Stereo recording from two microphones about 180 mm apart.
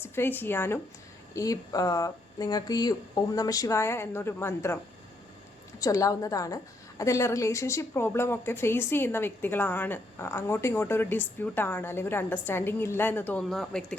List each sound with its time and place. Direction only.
0.0 s a woman's voice: 10° left (ahead or behind)
5.8 s a woman's voice: 20° left (ahead or behind); by 13.8 s centre (ahead or behind)